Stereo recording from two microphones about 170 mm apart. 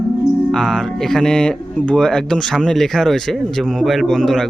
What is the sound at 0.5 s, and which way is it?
A man's voice, 5° left (ahead or behind).